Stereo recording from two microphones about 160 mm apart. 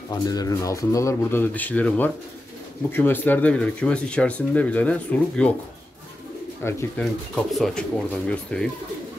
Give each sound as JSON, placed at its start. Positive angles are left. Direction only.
{"t": 0.1, "sound": "speech", "side_deg": 25}
{"t": 6.6, "sound": "speech", "side_deg": 10}